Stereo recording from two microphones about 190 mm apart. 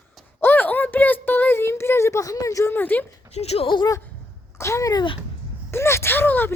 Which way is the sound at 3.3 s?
35° left (ahead or behind).